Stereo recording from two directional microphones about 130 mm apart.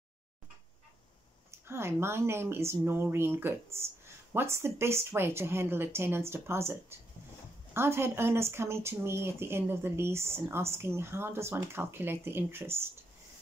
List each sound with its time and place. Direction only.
1.7 s speech: 20° right (ahead or behind)